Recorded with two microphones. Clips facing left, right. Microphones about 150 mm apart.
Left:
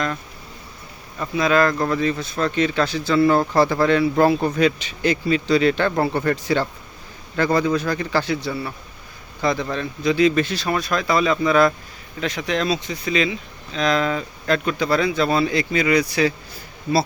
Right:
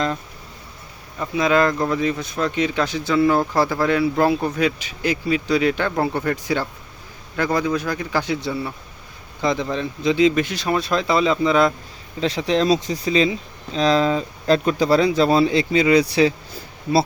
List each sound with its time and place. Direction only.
1.2 s speech: 20° right (ahead or behind)